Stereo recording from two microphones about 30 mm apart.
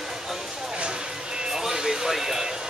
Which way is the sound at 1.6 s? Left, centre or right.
Centre.